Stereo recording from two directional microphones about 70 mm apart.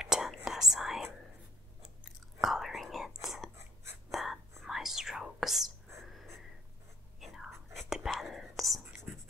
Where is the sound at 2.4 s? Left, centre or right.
Centre.